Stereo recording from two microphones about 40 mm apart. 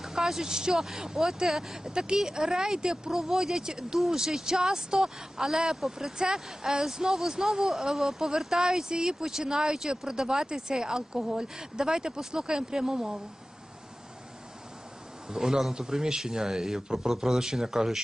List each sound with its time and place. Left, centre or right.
0.0 s speech: centre
15.3 s speech: centre